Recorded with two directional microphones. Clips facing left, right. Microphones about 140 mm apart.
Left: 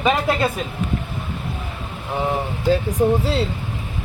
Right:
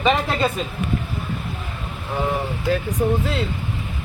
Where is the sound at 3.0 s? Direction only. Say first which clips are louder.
Left 3 dB; 30° left (ahead or behind).